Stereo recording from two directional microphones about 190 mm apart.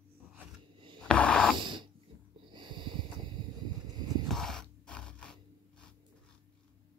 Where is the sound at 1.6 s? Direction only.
25° right (ahead or behind).